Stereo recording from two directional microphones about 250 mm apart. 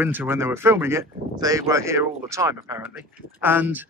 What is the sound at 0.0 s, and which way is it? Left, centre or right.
Speech, centre.